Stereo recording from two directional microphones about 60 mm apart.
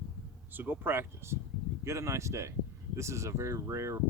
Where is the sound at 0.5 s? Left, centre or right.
Right.